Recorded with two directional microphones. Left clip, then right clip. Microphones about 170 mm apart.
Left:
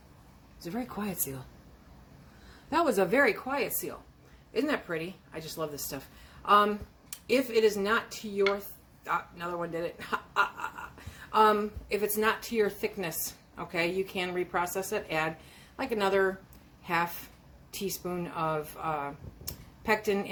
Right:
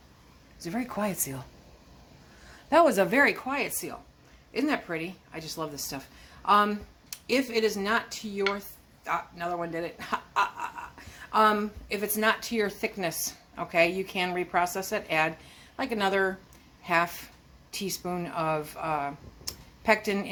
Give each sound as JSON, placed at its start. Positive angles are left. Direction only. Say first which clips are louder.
{"t": 0.6, "sound": "speech", "louder": "right 5 dB", "side_deg": -30}
{"t": 2.6, "sound": "a woman's voice", "louder": "right 5 dB", "side_deg": -30}